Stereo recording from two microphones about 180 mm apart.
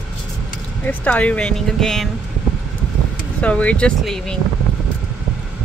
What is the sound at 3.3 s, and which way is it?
Speech, 5° left (ahead or behind).